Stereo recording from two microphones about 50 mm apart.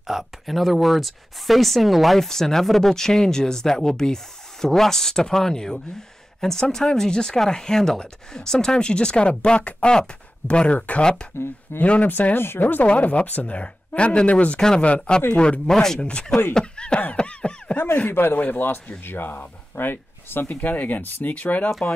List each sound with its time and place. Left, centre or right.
0.0 s speech: centre
11.8 s speech: left
12.1 s speech: left
12.8 s speech: left
15.7 s speech: centre
16.5 s snicker: centre
17.2 s a sound: centre
17.9 s speech: left